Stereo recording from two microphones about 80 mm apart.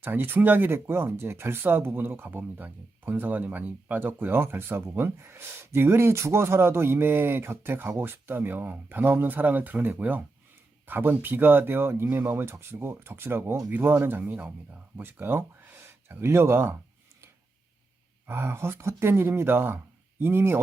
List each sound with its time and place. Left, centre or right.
0.0 s speech: right
18.3 s speech: right